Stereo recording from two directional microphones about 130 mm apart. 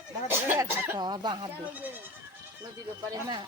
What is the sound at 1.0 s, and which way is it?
Speech, 35° right (ahead or behind).